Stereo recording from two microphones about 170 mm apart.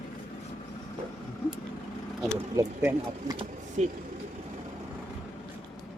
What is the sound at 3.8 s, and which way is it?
Speech, 40° right (ahead or behind).